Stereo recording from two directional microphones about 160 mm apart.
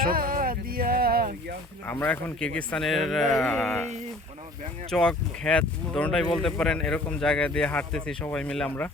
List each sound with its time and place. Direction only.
0.0 s a sound: 65° right (ahead or behind)
1.9 s speech: 10° left (ahead or behind)
4.9 s speech: 5° left (ahead or behind)